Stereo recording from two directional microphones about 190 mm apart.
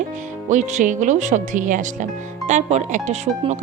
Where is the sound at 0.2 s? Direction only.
40° right (ahead or behind).